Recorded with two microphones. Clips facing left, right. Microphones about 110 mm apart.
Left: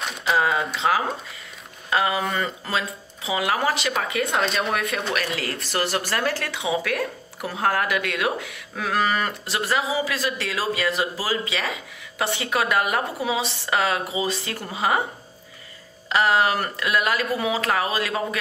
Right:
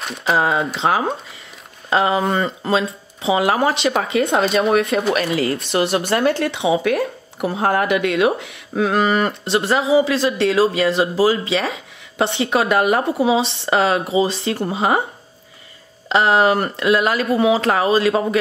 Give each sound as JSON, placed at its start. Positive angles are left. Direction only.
{"t": 0.0, "sound": "speech", "side_deg": 0}
{"t": 0.3, "sound": "speech", "side_deg": -30}
{"t": 16.1, "sound": "speech", "side_deg": -25}